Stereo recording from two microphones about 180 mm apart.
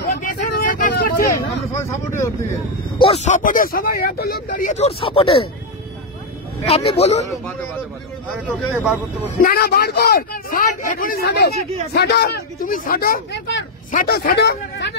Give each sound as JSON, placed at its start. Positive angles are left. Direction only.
{"t": 0.0, "sound": "vehicle", "side_deg": 55}
{"t": 1.8, "sound": "speech", "side_deg": 15}
{"t": 3.0, "sound": "speech", "side_deg": 35}
{"t": 6.6, "sound": "a man's voice", "side_deg": 30}
{"t": 8.7, "sound": "speech", "side_deg": -5}
{"t": 9.4, "sound": "a man's voice", "side_deg": 60}